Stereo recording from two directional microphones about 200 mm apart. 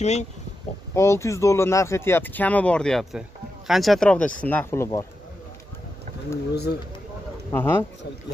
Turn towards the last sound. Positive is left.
turn(degrees=10)  # may be behind; listen again after turning